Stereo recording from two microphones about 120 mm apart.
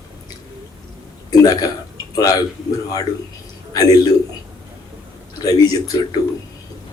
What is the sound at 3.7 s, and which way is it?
Speech, 30° left (ahead or behind).